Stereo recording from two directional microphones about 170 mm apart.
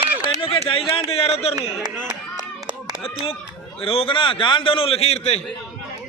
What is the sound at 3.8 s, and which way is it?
A man's voice, 35° left (ahead or behind).